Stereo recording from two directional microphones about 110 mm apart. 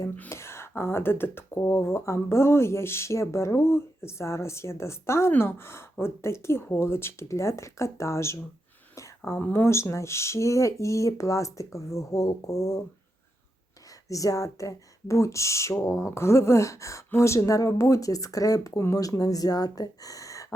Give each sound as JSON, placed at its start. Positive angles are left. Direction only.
{"t": 0.2, "sound": "speech", "side_deg": 25}
{"t": 14.1, "sound": "speech", "side_deg": 30}